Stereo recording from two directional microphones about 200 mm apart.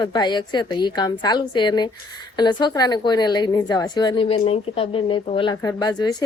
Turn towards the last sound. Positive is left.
turn(degrees=20)  # may be behind; listen again after turning